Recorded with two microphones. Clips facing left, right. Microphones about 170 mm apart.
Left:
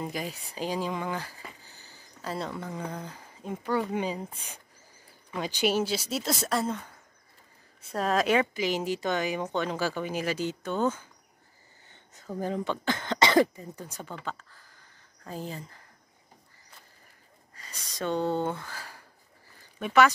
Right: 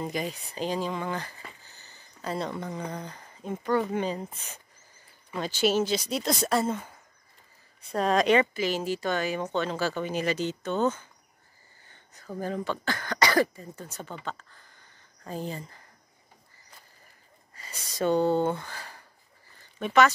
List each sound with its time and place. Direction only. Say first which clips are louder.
0.0 s speech: right 2 dB; 5° left (ahead or behind)
7.9 s speech: right 3 dB; 5° left (ahead or behind)
11.9 s a sound: even; 20° left (ahead or behind)
12.4 s speech: left 1 dB; 20° left (ahead or behind); by 15.6 s centre (ahead or behind)
17.6 s speech: right 5 dB; 5° right (ahead or behind)